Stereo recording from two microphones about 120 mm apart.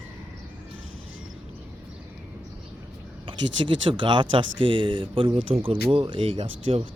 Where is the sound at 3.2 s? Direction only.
45° right (ahead or behind).